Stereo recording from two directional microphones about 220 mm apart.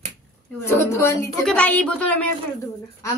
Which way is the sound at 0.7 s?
10° left (ahead or behind).